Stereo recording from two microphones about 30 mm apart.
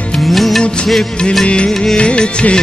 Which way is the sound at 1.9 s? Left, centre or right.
Left.